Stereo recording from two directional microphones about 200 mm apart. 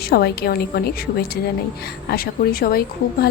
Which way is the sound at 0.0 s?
50° left (ahead or behind).